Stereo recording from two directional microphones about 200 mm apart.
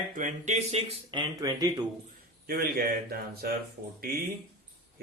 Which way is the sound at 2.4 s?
50° right (ahead or behind).